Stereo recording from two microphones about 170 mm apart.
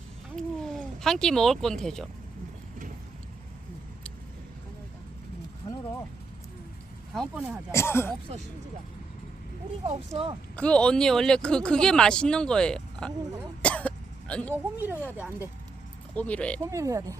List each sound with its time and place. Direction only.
0.3 s speech: centre (ahead or behind)
5.6 s a sound: 30° left (ahead or behind)
7.1 s speech: centre (ahead or behind)
7.7 s speech: 15° left (ahead or behind)
10.5 s speech: 5° left (ahead or behind)
13.6 s cough: 10° left (ahead or behind)
14.5 s speech: 10° right (ahead or behind)
16.1 s speech: 10° left (ahead or behind)
16.6 s speech: 20° right (ahead or behind)